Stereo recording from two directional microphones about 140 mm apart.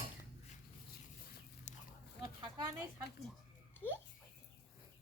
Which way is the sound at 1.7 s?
60° left (ahead or behind).